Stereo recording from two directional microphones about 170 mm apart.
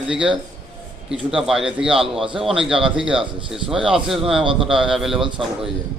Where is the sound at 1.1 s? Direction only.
5° right (ahead or behind).